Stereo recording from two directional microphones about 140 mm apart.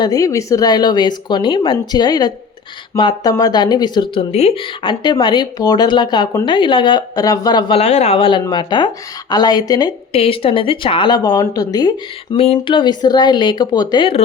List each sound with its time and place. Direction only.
0.0 s speech: 25° left (ahead or behind)
7.8 s speech: 50° left (ahead or behind); by 9.9 s 30° left (ahead or behind)
10.1 s speech: 45° left (ahead or behind)
12.4 s speech: 40° left (ahead or behind)